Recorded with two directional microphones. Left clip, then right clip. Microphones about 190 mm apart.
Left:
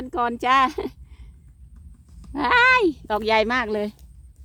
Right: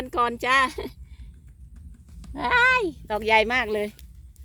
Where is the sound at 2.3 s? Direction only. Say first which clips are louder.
Left 3 dB; 30° left (ahead or behind).